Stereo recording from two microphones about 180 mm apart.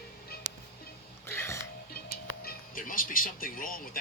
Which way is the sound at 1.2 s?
15° left (ahead or behind).